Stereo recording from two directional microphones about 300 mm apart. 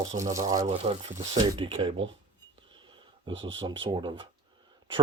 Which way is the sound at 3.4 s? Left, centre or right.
Centre.